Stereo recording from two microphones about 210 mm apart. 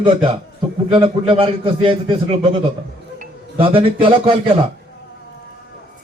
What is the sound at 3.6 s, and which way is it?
A man's voice, 25° right (ahead or behind).